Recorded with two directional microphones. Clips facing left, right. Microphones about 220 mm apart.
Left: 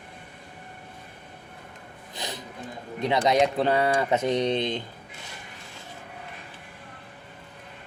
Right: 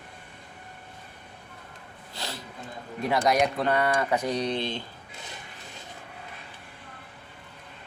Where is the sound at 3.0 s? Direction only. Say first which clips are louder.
Left 2 dB; 20° left (ahead or behind).